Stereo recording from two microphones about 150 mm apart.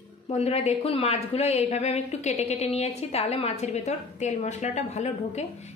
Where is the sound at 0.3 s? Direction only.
40° left (ahead or behind).